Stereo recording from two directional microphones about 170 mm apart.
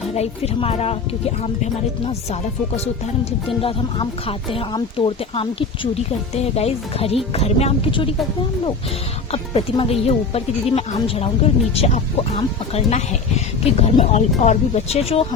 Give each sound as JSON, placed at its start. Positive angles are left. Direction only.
{"t": 0.1, "sound": "speech", "side_deg": 35}
{"t": 3.6, "sound": "speech", "side_deg": 30}
{"t": 9.3, "sound": "speech", "side_deg": 35}